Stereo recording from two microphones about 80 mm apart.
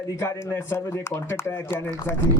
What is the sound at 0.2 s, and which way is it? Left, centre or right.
Speech, left.